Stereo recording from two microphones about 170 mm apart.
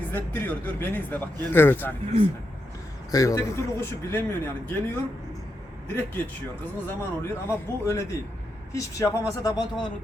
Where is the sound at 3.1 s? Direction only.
20° left (ahead or behind).